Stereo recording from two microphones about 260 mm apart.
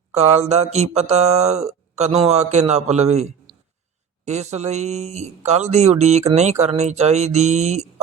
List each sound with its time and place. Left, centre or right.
0.1 s speech: right
4.3 s speech: right